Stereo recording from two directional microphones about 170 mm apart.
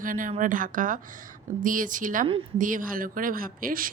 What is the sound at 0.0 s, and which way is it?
Speech, 55° right (ahead or behind).